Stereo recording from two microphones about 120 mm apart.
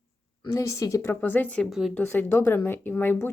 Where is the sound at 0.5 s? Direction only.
25° left (ahead or behind).